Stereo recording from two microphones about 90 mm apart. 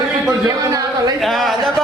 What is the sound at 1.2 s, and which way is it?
Speech, centre (ahead or behind).